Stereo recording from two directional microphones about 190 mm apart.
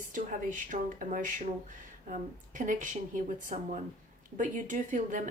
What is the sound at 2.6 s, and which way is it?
A woman's voice, 45° right (ahead or behind).